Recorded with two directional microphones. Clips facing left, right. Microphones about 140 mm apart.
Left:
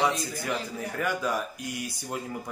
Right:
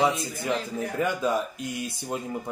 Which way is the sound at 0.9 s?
20° right (ahead or behind).